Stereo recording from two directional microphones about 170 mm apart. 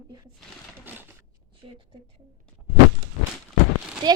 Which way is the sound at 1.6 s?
30° right (ahead or behind).